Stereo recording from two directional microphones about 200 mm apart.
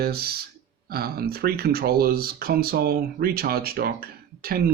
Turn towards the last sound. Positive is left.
turn(degrees=-50)  # may be behind; listen again after turning